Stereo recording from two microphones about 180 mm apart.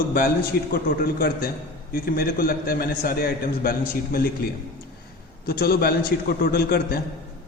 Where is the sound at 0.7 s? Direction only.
55° left (ahead or behind).